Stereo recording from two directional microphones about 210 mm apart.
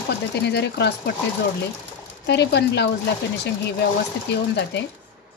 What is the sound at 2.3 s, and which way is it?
Speech, 50° left (ahead or behind).